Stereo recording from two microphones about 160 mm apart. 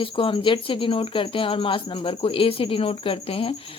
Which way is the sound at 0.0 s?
35° left (ahead or behind).